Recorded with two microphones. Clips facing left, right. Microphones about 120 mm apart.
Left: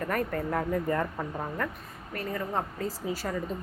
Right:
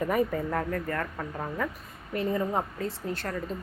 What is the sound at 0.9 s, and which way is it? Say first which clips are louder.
Speech: left 3 dB; 15° left (ahead or behind).